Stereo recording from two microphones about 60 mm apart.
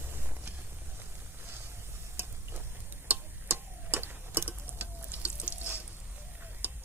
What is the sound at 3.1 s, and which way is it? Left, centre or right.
Clock, right.